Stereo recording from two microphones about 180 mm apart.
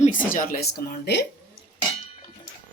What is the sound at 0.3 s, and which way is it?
Speech, 50° left (ahead or behind).